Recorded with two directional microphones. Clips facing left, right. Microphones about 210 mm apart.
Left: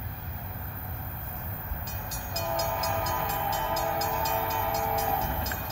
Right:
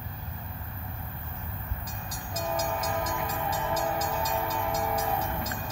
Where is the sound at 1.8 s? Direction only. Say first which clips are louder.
Even; 25° left (ahead or behind).